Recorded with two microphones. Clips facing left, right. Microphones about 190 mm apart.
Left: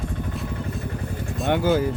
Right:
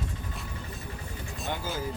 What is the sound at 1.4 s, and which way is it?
Speech, 70° left (ahead or behind).